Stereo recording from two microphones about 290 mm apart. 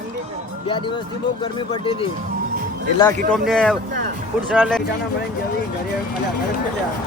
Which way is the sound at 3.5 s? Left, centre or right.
Centre.